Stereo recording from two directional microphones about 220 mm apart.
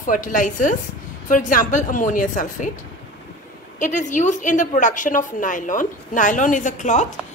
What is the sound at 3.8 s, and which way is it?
A woman's voice, 35° left (ahead or behind).